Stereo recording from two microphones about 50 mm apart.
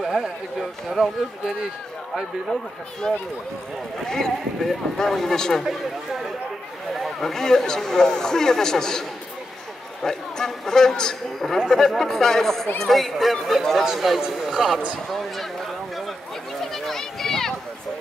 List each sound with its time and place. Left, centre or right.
0.0 s speech: centre
3.0 s speech: centre
5.7 s speech: centre
10.0 s speech: centre
16.6 s a sound: centre